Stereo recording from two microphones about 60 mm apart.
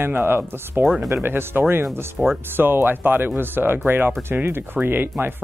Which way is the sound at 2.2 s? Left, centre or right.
Centre.